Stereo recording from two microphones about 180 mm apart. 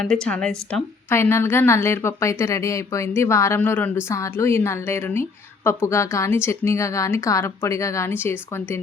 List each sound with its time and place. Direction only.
0.0 s a woman's voice: 5° left (ahead or behind)